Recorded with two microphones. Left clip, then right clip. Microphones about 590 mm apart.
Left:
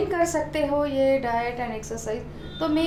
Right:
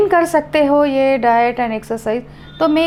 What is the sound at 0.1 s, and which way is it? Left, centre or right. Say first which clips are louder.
A woman's voice: right 10 dB; right.